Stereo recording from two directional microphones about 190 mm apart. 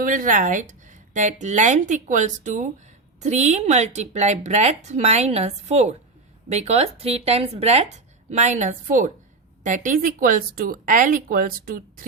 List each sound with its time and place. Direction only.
0.0 s speech: 45° right (ahead or behind)